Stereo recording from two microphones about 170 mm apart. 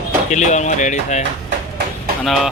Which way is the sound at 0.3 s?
45° left (ahead or behind).